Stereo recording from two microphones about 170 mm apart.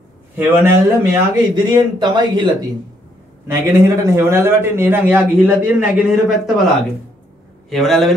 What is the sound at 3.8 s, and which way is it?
A man's voice, 15° right (ahead or behind).